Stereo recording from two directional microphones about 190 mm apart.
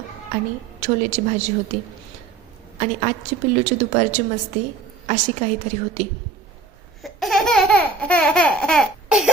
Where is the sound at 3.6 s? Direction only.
40° right (ahead or behind).